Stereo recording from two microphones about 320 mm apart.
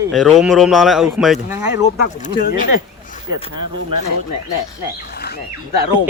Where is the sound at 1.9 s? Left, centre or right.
Left.